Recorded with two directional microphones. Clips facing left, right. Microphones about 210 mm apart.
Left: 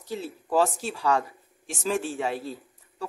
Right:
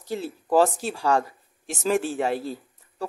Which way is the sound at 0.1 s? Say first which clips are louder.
Right 4 dB; 40° right (ahead or behind).